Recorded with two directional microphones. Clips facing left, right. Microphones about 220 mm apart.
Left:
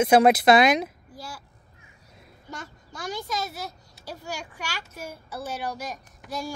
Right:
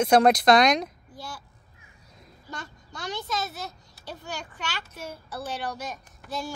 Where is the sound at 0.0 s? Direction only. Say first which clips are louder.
Left 1 dB; 5° left (ahead or behind).